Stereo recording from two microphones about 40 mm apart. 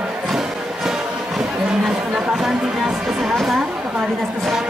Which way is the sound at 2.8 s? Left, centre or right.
Centre.